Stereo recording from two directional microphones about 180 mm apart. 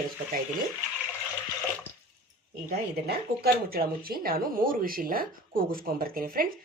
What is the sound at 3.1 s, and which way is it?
Speech, 60° right (ahead or behind).